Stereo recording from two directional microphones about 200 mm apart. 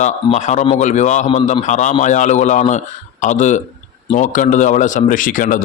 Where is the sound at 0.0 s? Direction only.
35° left (ahead or behind).